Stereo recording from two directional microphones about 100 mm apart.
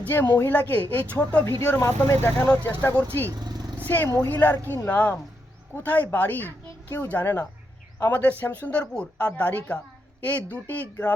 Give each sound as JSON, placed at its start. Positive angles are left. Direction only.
{"t": 0.0, "sound": "speech", "side_deg": 20}
{"t": 3.3, "sound": "vehicle", "side_deg": -45}
{"t": 3.8, "sound": "speech", "side_deg": 20}